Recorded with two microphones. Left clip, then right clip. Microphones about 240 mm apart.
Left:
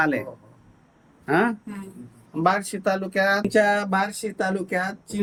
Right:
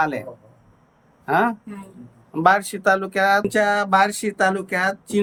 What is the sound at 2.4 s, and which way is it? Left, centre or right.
Speech, centre.